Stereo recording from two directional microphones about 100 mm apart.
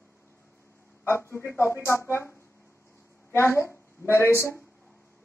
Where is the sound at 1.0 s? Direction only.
25° left (ahead or behind).